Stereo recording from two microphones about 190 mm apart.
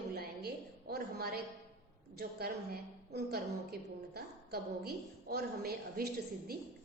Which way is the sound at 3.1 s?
55° right (ahead or behind).